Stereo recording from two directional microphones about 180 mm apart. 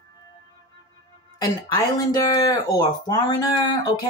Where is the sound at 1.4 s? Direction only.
20° left (ahead or behind).